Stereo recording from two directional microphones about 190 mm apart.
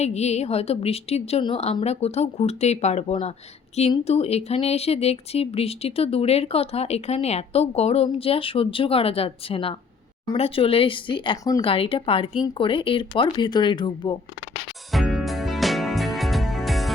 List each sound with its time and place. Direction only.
0.0 s speech: 35° left (ahead or behind)
14.9 s music: centre (ahead or behind)